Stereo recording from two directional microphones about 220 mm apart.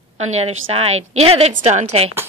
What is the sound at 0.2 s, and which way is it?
Speech, 30° right (ahead or behind).